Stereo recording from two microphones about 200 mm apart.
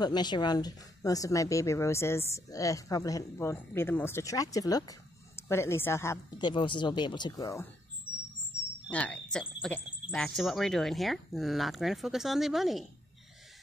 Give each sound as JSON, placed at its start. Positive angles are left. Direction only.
{"t": 0.0, "sound": "speech", "side_deg": 20}
{"t": 8.9, "sound": "speech", "side_deg": 5}